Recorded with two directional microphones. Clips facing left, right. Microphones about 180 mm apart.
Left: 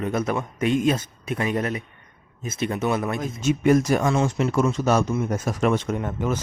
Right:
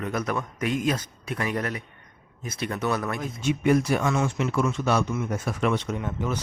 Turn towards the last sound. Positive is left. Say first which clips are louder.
# left 4 dB
turn(degrees=45)  # may be behind; listen again after turning